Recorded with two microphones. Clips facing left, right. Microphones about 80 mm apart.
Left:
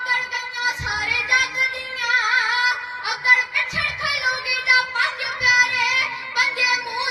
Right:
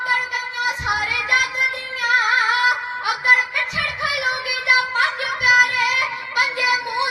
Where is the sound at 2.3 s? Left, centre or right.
Right.